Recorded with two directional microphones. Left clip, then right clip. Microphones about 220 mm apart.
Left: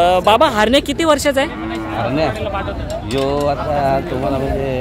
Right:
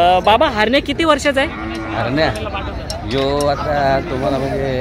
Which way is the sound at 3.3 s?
5° left (ahead or behind).